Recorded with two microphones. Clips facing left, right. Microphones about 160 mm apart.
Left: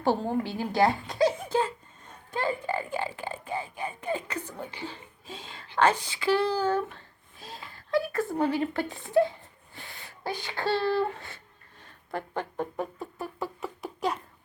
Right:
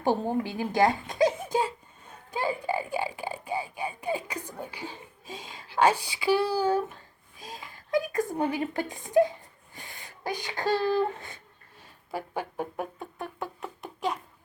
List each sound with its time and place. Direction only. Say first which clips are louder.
0.0 s speech: even; 15° right (ahead or behind)
1.2 s a sound: even; 15° right (ahead or behind)
2.3 s speech: even; 10° right (ahead or behind)
9.7 s a sound: even; 15° right (ahead or behind)
10.6 s speech: right 1 dB; 40° right (ahead or behind)
10.8 s speech: right 1 dB; 15° right (ahead or behind); by 14.2 s centre (ahead or behind)